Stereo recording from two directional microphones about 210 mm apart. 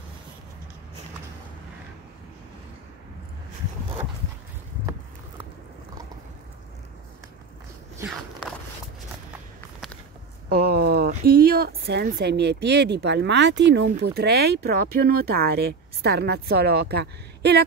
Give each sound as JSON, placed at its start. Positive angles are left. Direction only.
{"t": 8.0, "sound": "walk", "side_deg": 0}
{"t": 10.5, "sound": "a sound", "side_deg": -50}
{"t": 11.1, "sound": "speech", "side_deg": -45}